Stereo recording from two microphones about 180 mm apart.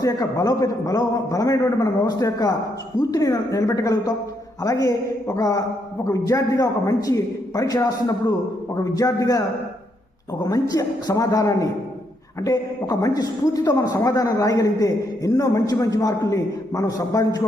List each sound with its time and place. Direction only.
0.0 s a man's voice: 20° left (ahead or behind)
10.4 s a man's voice: 20° left (ahead or behind)